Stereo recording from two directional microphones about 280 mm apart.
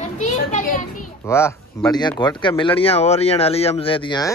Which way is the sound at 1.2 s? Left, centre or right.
Centre.